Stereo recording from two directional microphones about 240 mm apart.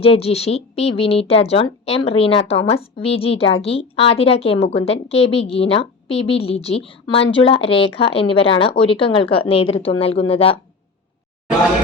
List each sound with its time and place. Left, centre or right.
0.0 s a woman's voice: left